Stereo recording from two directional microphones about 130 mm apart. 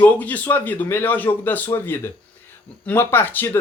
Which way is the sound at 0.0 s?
10° left (ahead or behind).